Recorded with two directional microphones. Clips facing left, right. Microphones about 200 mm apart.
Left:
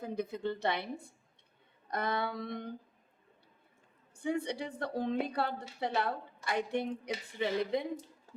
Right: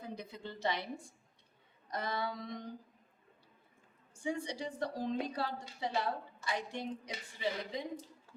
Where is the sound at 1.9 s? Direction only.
60° left (ahead or behind).